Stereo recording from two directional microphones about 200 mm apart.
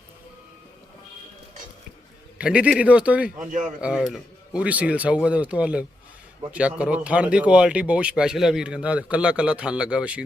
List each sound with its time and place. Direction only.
2.4 s speech: 5° right (ahead or behind)
3.3 s speech: 40° right (ahead or behind)
3.8 s speech: 5° right (ahead or behind)